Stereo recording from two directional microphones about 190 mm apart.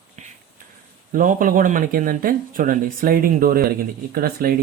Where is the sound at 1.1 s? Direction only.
45° right (ahead or behind).